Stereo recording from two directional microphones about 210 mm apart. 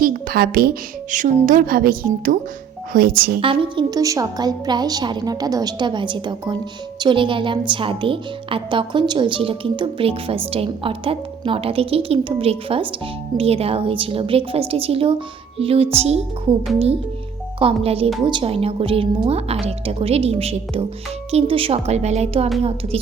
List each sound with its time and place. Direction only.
0.0 s speech: 45° right (ahead or behind)
3.4 s a woman's voice: 25° right (ahead or behind)
17.6 s a woman's voice: 25° right (ahead or behind)